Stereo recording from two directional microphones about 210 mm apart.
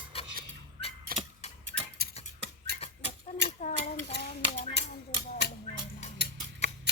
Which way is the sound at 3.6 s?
35° left (ahead or behind).